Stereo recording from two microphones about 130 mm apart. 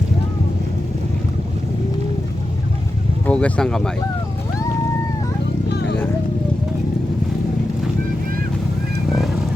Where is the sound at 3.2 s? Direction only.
10° left (ahead or behind).